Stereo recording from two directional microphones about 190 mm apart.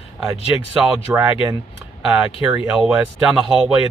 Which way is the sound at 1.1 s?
10° right (ahead or behind).